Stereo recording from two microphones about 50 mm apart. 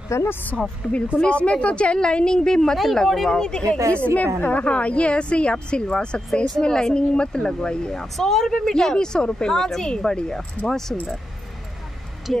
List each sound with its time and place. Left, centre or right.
0.3 s speech: left
0.6 s speech: centre
3.3 s a woman's voice: centre
3.9 s a woman's voice: left
10.9 s speech: centre
12.3 s speech: centre